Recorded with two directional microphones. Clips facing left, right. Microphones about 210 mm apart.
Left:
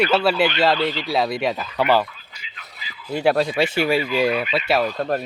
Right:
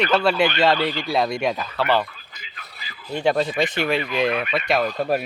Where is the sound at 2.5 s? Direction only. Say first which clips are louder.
Left 1 dB; 45° right (ahead or behind).